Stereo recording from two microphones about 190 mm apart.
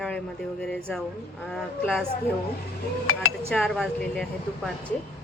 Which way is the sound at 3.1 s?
90° left.